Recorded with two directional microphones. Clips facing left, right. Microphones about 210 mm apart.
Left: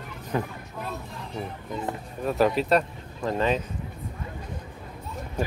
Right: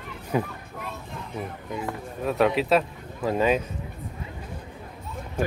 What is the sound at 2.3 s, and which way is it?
Speech, centre (ahead or behind).